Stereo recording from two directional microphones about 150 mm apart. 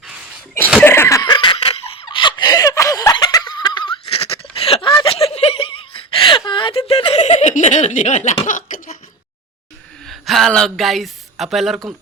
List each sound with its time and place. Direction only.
0.8 s laughter: 15° left (ahead or behind); by 8.4 s 50° left (ahead or behind)
8.4 s a sound: 60° left (ahead or behind)
10.1 s speech: centre (ahead or behind)